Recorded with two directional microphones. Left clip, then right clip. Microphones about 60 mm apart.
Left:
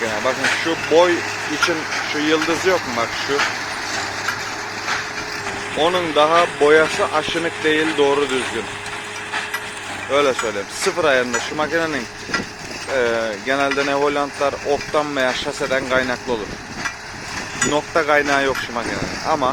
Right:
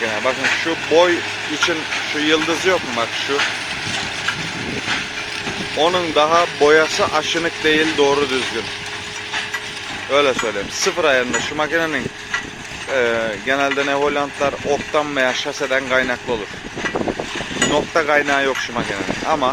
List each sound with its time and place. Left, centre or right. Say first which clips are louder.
0.0 s speech: right 1 dB; centre
2.7 s speech: even; right
5.8 s speech: even; right
10.1 s speech: right 1 dB; centre
17.7 s speech: even; centre